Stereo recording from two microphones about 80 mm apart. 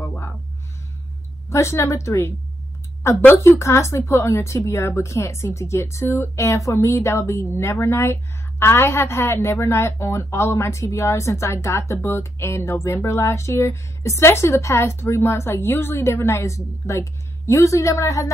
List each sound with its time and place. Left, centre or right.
1.5 s a woman's voice: left